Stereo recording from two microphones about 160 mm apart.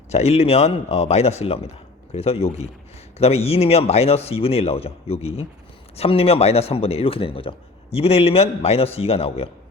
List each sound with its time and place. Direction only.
0.1 s speech: 40° left (ahead or behind)